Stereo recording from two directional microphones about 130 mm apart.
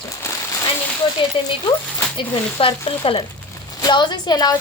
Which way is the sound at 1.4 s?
40° left (ahead or behind).